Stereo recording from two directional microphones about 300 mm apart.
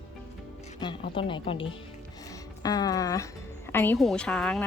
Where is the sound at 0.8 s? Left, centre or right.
Centre.